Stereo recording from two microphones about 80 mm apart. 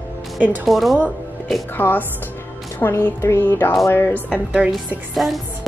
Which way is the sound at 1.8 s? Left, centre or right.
Left.